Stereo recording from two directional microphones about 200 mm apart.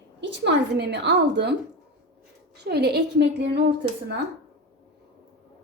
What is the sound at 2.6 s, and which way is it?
A woman's voice, 55° right (ahead or behind).